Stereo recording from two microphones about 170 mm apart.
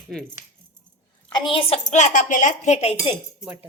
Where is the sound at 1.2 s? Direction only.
25° left (ahead or behind).